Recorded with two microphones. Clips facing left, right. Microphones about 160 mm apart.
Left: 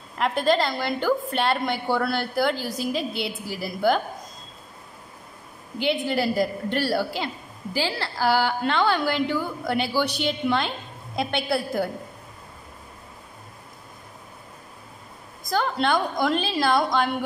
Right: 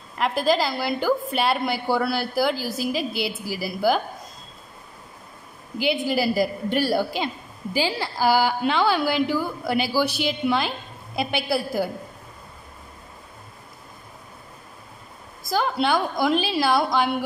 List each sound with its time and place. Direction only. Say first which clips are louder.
0.2 s a woman's voice: even; 5° right (ahead or behind)
5.8 s a woman's voice: right 1 dB; 5° right (ahead or behind)
15.5 s a woman's voice: right 1 dB; 5° right (ahead or behind)